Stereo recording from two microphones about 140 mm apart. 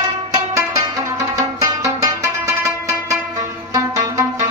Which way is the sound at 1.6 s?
20° right (ahead or behind).